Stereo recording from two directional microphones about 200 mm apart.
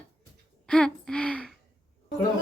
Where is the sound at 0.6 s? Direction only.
5° left (ahead or behind).